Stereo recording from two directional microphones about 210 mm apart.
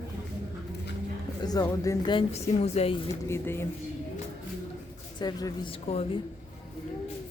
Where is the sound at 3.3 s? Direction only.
10° left (ahead or behind).